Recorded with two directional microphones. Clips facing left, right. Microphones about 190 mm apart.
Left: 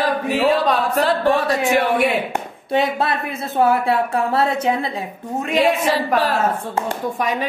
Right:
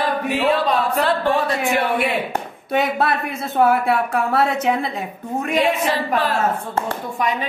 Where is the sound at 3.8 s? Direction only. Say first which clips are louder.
Left 1 dB; 25° left (ahead or behind).